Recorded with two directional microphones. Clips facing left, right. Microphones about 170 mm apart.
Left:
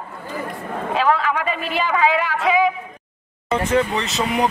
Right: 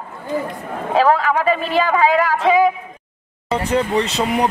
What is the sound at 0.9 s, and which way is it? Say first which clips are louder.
Speech: right 4 dB; 40° right (ahead or behind).